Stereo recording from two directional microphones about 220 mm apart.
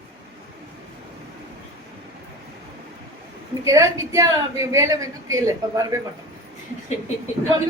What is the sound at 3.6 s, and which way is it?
A woman's voice, 15° right (ahead or behind).